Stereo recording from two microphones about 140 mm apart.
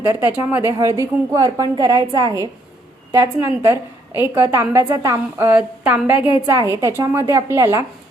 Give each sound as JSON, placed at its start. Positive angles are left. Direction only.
{"t": 0.0, "sound": "a woman's voice", "side_deg": -15}
{"t": 0.7, "sound": "a woman's voice", "side_deg": -20}
{"t": 3.4, "sound": "a woman's voice", "side_deg": -15}
{"t": 5.5, "sound": "a woman's voice", "side_deg": -10}
{"t": 6.4, "sound": "a woman's voice", "side_deg": -25}